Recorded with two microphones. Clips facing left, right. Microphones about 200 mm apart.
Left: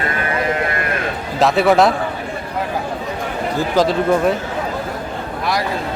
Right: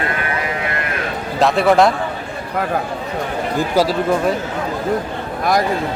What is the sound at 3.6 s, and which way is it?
Speech, 5° right (ahead or behind).